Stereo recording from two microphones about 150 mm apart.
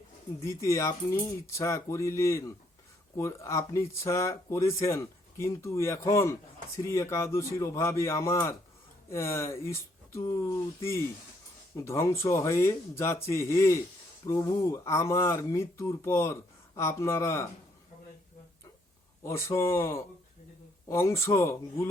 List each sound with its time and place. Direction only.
0.4 s speech: 20° left (ahead or behind)
19.2 s speech: 20° left (ahead or behind)